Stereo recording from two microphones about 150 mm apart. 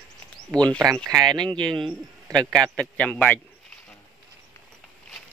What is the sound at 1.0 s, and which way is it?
Speech, 25° right (ahead or behind).